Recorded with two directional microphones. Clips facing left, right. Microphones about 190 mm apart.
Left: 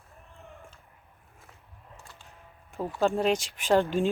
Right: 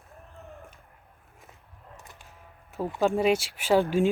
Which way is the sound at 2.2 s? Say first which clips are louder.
Right 1 dB; 5° right (ahead or behind).